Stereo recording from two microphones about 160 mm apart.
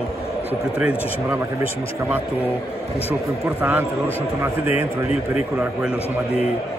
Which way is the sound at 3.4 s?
10° right (ahead or behind).